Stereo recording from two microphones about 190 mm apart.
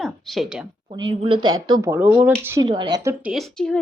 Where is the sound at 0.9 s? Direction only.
25° right (ahead or behind).